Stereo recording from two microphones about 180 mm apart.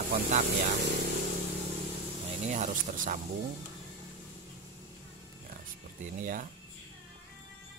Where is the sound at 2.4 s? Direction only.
40° right (ahead or behind).